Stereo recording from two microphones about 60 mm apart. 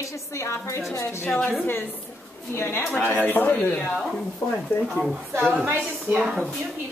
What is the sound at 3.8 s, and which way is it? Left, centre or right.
Speech, centre.